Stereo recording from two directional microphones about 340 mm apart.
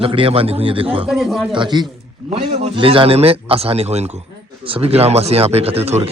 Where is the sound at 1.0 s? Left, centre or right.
Centre.